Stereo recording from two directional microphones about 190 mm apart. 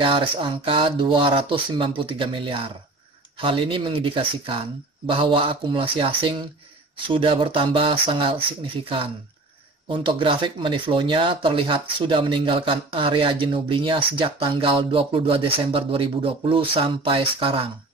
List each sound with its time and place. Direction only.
0.0 s speech: 25° right (ahead or behind)